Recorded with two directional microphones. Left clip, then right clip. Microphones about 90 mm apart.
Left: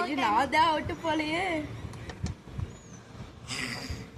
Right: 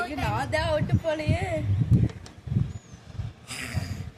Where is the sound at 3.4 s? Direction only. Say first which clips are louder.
Left 1 dB; 15° right (ahead or behind).